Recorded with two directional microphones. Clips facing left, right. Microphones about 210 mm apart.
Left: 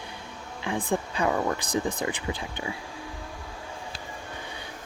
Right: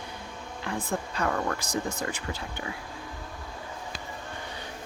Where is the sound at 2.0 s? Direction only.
15° left (ahead or behind).